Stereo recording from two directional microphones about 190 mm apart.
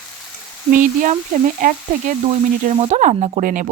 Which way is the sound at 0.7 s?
45° right (ahead or behind).